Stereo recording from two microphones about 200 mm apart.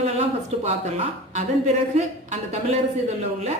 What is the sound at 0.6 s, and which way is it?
A woman's voice, 35° right (ahead or behind).